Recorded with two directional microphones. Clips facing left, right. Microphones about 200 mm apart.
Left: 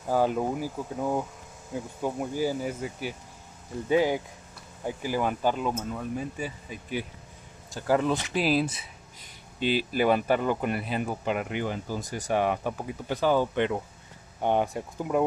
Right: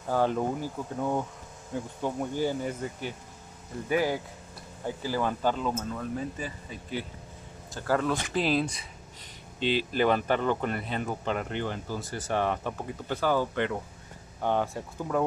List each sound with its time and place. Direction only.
0.1 s speech: 10° left (ahead or behind)
3.9 s speech: 20° left (ahead or behind)
8.5 s speech: 5° left (ahead or behind)